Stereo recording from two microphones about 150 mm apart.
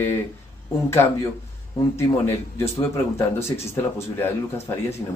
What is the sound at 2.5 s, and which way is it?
A man's voice, 20° left (ahead or behind).